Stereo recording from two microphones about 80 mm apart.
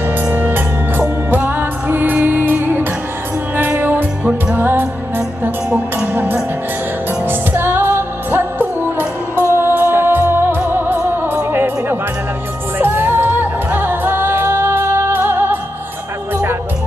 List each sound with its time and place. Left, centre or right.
0.3 s music: right